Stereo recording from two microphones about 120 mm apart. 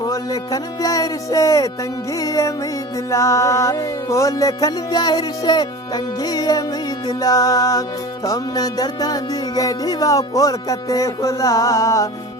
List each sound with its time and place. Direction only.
0.0 s music: 30° left (ahead or behind)